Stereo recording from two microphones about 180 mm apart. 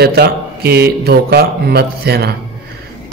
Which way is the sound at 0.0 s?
60° right (ahead or behind).